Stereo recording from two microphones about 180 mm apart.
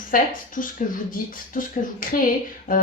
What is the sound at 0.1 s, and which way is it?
Speech, 50° left (ahead or behind).